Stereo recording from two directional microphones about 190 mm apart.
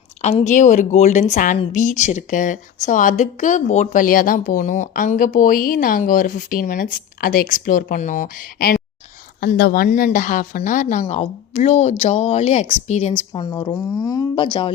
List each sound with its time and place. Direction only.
0.2 s a woman's voice: 35° left (ahead or behind)
13.3 s speech: 25° left (ahead or behind)